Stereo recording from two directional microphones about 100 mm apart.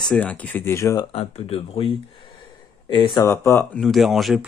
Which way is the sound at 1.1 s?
85° left.